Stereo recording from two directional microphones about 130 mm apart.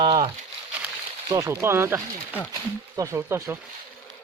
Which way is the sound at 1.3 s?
20° right (ahead or behind).